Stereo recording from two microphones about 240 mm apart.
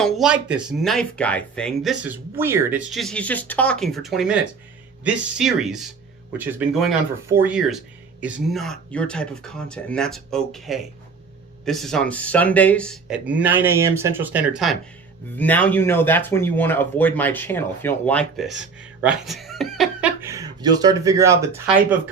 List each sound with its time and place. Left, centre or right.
0.0 s speech: centre
20.2 s speech: centre